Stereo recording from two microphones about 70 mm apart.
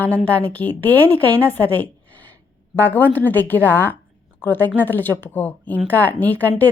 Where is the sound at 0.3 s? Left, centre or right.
Left.